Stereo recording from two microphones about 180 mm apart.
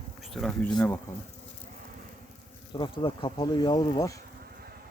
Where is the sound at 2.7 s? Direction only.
25° left (ahead or behind).